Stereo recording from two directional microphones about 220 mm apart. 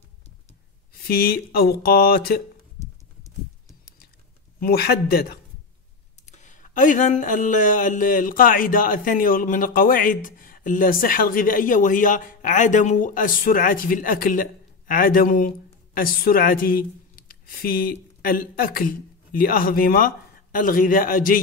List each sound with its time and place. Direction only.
1.0 s speech: 45° left (ahead or behind)
2.8 s a sound: 15° left (ahead or behind)
4.6 s speech: 45° left (ahead or behind)
6.2 s speech: 35° left (ahead or behind)